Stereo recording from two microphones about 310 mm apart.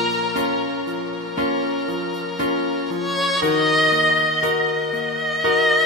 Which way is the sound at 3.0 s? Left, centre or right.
Centre.